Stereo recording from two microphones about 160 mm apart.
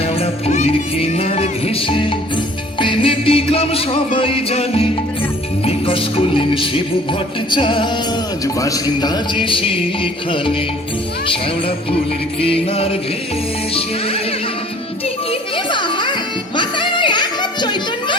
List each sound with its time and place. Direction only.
0.0 s music: 40° left (ahead or behind)
8.4 s music: 20° left (ahead or behind)
12.4 s music: 35° left (ahead or behind)
15.0 s music: 35° left (ahead or behind)